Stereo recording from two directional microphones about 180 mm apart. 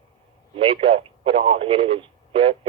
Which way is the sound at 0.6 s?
30° right (ahead or behind).